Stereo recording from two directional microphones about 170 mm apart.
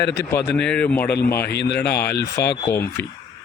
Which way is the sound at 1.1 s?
65° left (ahead or behind).